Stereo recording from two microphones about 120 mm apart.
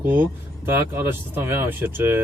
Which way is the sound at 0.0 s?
15° right (ahead or behind).